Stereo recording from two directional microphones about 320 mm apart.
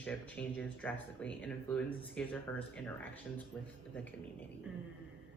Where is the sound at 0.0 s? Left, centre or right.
Centre.